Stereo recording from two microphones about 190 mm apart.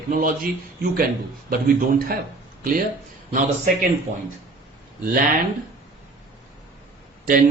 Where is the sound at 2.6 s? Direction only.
50° right (ahead or behind).